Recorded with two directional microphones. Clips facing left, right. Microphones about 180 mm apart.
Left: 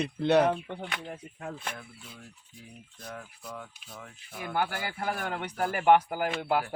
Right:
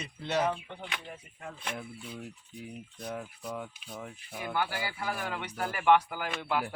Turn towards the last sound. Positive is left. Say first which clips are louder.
# left 4 dB
turn(degrees=45)  # may be behind; listen again after turning